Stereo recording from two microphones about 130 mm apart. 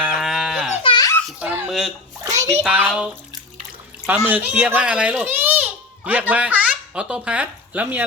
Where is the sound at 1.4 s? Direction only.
15° right (ahead or behind).